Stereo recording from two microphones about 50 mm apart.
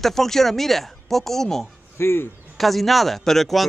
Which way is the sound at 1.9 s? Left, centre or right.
Left.